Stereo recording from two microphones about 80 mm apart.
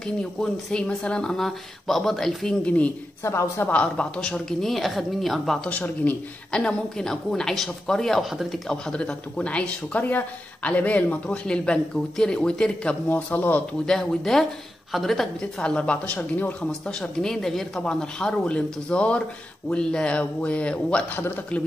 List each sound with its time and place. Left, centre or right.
0.0 s speech: centre
3.3 s a woman's voice: left
3.6 s speech: centre
5.7 s speech: centre
13.1 s speech: left
13.8 s speech: centre
17.0 s speech: centre